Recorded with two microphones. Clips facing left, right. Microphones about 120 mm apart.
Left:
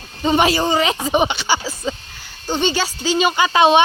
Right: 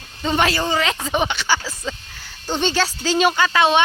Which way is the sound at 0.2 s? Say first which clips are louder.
Left 4 dB; 15° left (ahead or behind).